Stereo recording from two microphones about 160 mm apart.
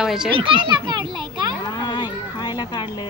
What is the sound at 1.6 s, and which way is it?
Music, 25° left (ahead or behind).